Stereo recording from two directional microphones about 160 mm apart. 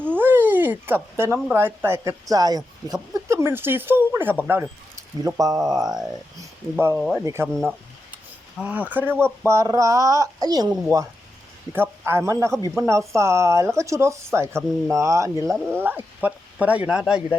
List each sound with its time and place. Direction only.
0.2 s speech: 10° right (ahead or behind)
5.8 s speech: 5° right (ahead or behind)
6.4 s speech: 15° right (ahead or behind)
7.4 s speech: 5° left (ahead or behind)
8.1 s speech: 10° right (ahead or behind)